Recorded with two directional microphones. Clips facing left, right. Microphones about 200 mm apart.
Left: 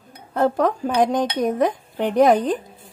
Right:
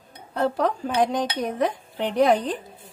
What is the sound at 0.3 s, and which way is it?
Speech, 50° left (ahead or behind).